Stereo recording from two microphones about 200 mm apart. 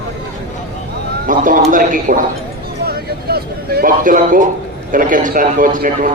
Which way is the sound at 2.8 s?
50° right (ahead or behind).